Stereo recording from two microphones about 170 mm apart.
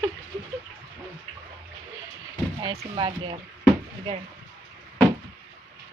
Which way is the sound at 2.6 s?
25° right (ahead or behind).